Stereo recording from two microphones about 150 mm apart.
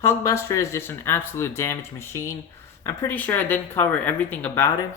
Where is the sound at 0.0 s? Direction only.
20° left (ahead or behind).